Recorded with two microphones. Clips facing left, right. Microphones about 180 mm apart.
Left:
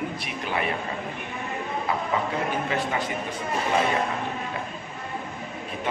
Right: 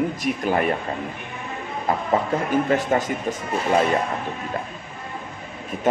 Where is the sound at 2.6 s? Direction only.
45° right (ahead or behind).